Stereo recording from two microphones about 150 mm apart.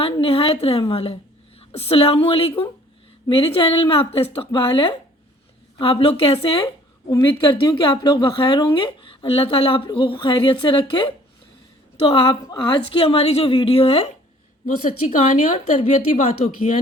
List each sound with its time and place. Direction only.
0.0 s a woman's voice: 35° left (ahead or behind)
7.1 s a woman's voice: 25° left (ahead or behind); by 14.1 s 40° left (ahead or behind)
14.8 s a woman's voice: 55° left (ahead or behind)